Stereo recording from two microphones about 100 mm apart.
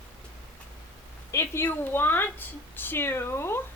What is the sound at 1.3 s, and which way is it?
A woman's voice, 25° left (ahead or behind).